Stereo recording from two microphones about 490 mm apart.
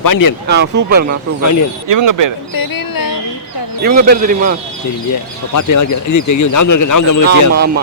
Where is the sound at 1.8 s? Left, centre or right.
Right.